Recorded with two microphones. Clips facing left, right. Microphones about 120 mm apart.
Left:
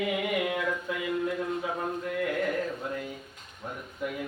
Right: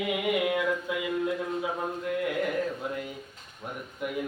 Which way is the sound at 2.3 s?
10° right (ahead or behind).